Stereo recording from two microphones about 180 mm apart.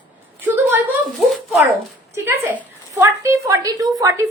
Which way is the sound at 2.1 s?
15° right (ahead or behind).